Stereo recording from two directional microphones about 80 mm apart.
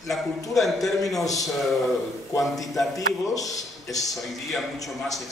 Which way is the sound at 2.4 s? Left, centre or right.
Centre.